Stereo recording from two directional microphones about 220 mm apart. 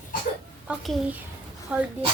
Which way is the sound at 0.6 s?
5° right (ahead or behind).